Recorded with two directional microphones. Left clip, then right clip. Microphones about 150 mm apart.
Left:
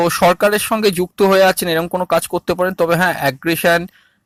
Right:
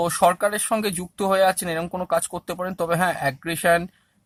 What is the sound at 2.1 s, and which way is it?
Speech, 30° left (ahead or behind).